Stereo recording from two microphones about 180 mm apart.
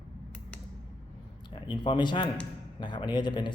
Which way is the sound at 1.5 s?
25° left (ahead or behind).